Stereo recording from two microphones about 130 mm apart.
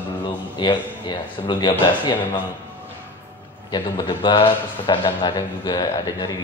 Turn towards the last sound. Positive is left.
turn(degrees=30)  # may be behind; listen again after turning